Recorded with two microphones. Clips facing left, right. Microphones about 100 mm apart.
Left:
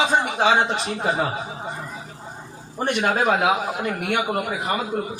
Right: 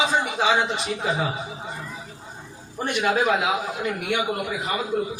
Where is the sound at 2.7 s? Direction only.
45° left (ahead or behind).